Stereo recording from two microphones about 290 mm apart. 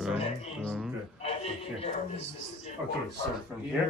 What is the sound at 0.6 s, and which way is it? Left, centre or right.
Speech, centre.